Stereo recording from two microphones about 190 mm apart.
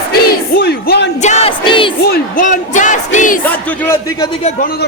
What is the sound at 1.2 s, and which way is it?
Speech, 35° left (ahead or behind).